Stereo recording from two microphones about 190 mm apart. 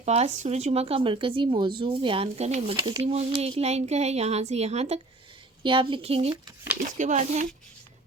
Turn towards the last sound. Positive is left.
turn(degrees=-40)  # may be behind; listen again after turning